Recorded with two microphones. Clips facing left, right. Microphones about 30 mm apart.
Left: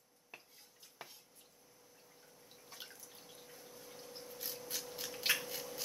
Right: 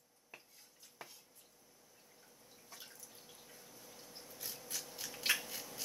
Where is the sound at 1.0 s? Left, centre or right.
Left.